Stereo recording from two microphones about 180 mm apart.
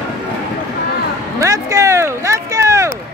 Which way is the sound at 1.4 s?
15° right (ahead or behind).